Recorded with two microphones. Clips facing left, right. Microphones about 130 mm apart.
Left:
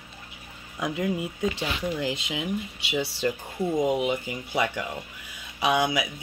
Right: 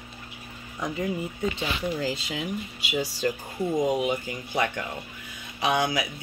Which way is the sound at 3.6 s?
5° left (ahead or behind).